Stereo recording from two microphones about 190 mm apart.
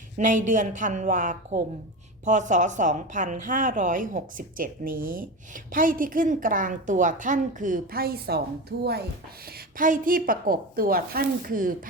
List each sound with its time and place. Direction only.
0.2 s a woman's voice: 45° right (ahead or behind)